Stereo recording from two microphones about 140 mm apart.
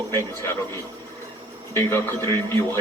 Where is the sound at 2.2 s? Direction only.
30° right (ahead or behind).